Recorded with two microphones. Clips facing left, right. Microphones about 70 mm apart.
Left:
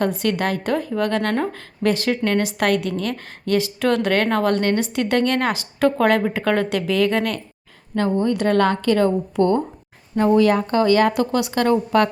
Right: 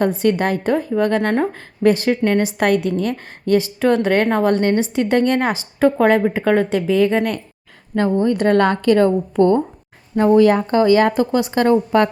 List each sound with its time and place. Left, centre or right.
0.2 s a woman's voice: right
8.4 s speech: right
9.0 s a woman's voice: right